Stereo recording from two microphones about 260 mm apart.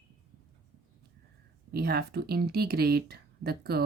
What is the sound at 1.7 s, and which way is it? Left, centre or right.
Speech, right.